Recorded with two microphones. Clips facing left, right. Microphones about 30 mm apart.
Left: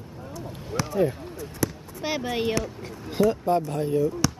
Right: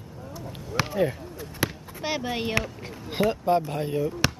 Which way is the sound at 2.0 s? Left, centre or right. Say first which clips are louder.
Left 1 dB; centre.